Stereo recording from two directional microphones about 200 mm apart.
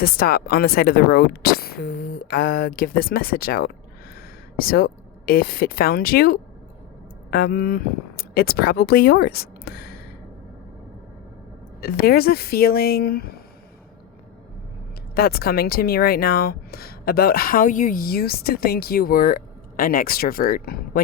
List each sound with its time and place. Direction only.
0.0 s speech: 50° left (ahead or behind)
11.8 s speech: 50° left (ahead or behind)
15.1 s speech: 50° left (ahead or behind)